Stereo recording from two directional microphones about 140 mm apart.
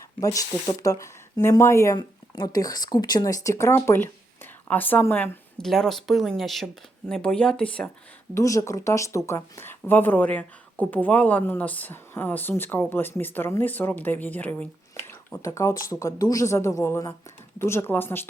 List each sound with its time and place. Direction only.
0.8 s speech: 25° left (ahead or behind)
2.0 s a woman's voice: 30° left (ahead or behind); by 5.6 s 10° left (ahead or behind)
5.6 s speech: centre (ahead or behind)
8.4 s speech: 20° left (ahead or behind)
15.3 s speech: 20° left (ahead or behind)